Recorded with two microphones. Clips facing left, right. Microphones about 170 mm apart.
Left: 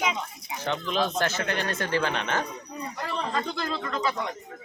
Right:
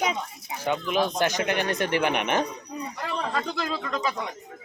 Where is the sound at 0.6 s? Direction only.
10° right (ahead or behind).